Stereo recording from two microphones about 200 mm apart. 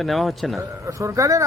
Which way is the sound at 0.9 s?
15° right (ahead or behind).